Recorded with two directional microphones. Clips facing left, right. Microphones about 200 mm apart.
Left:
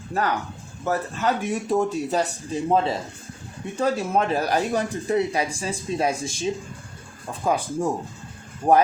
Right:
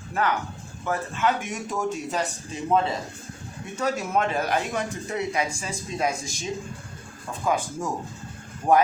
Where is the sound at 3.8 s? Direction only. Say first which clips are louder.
Left 3 dB; 30° left (ahead or behind).